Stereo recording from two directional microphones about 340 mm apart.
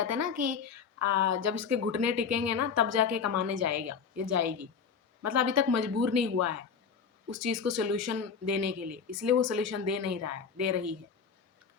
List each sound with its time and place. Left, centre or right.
0.0 s a woman's voice: right